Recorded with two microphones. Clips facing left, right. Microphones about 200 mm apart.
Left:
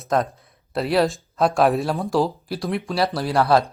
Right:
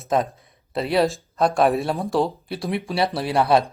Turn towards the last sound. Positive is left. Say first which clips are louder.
# even
turn(degrees=-20)  # may be behind; listen again after turning